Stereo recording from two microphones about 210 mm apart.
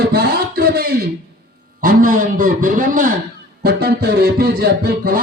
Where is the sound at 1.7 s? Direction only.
40° right (ahead or behind).